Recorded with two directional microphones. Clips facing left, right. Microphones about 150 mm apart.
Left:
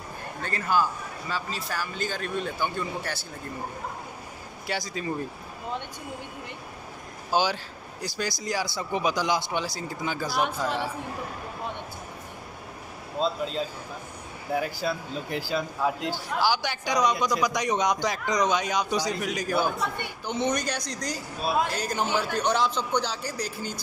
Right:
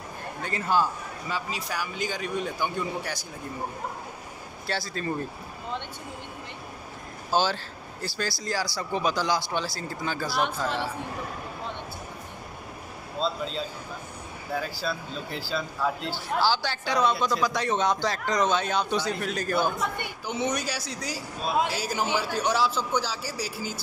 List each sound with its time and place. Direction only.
0.4 s a man's voice: 20° right (ahead or behind)
4.6 s speech: 15° left (ahead or behind)
7.2 s speech: 15° left (ahead or behind)
10.4 s speech: 5° left (ahead or behind)
14.5 s speech: 20° left (ahead or behind)
20.2 s a man's voice: 10° right (ahead or behind)